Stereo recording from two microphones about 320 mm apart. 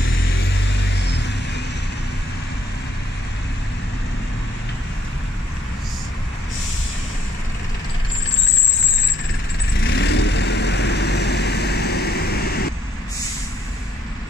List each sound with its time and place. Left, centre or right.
9.8 s vehicle: left